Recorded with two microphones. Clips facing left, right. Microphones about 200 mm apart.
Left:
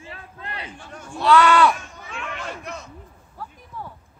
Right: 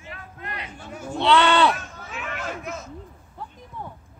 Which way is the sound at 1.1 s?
25° right (ahead or behind).